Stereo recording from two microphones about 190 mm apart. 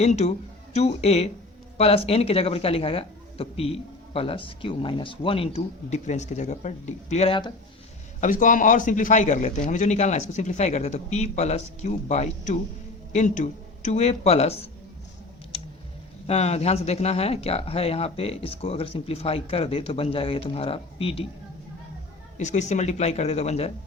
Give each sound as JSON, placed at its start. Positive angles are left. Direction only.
{"t": 0.0, "sound": "speech", "side_deg": 35}
{"t": 8.2, "sound": "speech", "side_deg": 45}
{"t": 16.2, "sound": "speech", "side_deg": 35}
{"t": 22.4, "sound": "speech", "side_deg": 40}